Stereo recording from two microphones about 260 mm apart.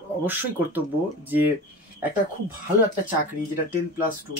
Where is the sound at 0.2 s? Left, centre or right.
Centre.